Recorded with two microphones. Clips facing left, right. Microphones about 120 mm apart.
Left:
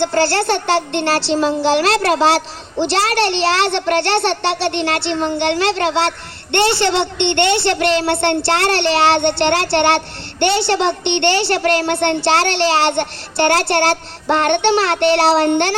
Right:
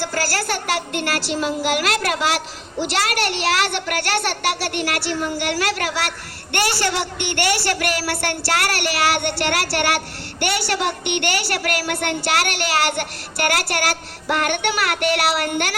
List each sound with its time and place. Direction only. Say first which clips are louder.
0.0 s a child's voice: left 8 dB; 25° left (ahead or behind)